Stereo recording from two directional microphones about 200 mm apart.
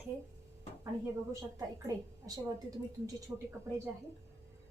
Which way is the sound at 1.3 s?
15° right (ahead or behind).